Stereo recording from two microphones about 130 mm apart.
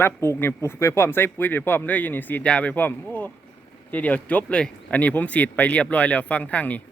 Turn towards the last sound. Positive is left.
turn(degrees=10)  # may be behind; listen again after turning